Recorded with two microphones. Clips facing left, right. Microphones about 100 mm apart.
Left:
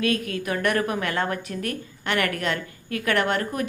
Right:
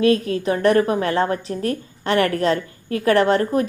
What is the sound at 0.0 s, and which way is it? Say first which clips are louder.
A woman's voice: right 8 dB; 30° right (ahead or behind).